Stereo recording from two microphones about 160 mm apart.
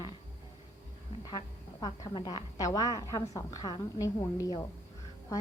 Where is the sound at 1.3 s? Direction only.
25° left (ahead or behind).